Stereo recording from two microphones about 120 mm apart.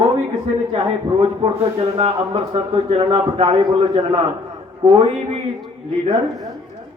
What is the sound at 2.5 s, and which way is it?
A man's voice, 40° right (ahead or behind).